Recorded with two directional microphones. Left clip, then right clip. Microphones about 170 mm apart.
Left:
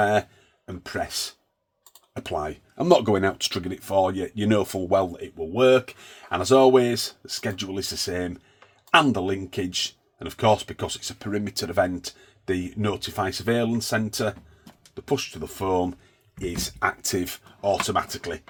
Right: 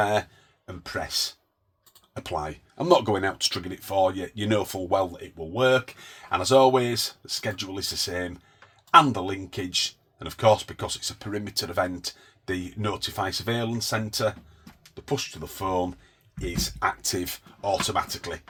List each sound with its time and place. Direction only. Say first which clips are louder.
0.0 s speech: left 3 dB; 55° left (ahead or behind)